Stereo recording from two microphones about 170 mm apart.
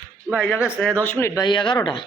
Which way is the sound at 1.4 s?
25° left (ahead or behind).